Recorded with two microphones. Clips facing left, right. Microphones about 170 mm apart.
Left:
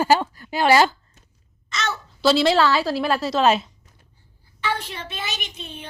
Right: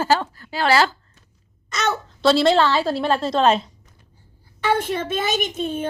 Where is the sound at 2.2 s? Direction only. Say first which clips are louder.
Right 1 dB; centre (ahead or behind).